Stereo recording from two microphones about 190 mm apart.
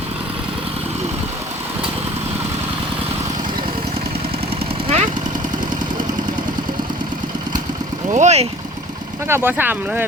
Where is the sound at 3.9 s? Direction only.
30° right (ahead or behind).